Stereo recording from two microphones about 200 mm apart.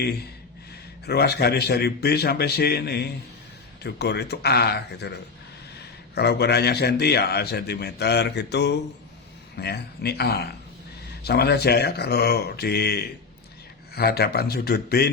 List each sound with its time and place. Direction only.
1.0 s a man's voice: 55° left (ahead or behind)